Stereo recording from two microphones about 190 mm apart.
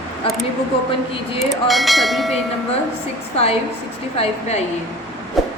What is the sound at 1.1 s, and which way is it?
Speech, 30° left (ahead or behind).